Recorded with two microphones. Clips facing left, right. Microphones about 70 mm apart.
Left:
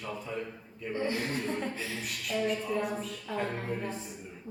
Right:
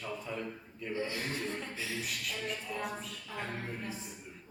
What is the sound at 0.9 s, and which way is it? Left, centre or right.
Speech, left.